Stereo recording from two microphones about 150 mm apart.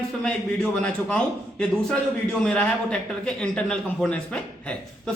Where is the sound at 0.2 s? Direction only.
5° left (ahead or behind).